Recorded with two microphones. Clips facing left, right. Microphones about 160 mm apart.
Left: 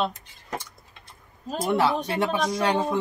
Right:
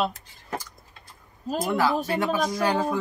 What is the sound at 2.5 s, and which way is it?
Speech, 25° left (ahead or behind).